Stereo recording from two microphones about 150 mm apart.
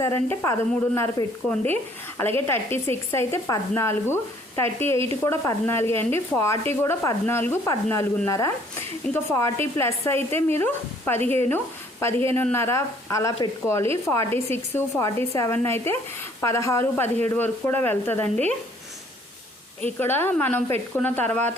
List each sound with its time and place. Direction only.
0.0 s speech: 20° left (ahead or behind)
19.8 s speech: 15° left (ahead or behind)